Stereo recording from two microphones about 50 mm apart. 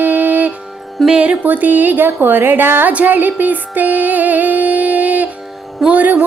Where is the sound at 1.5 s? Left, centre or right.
Right.